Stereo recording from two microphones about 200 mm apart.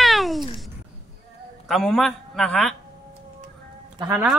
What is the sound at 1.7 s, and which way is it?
A man's voice, centre (ahead or behind).